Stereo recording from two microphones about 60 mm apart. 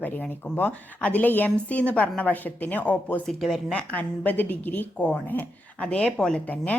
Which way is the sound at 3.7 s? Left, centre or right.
Left.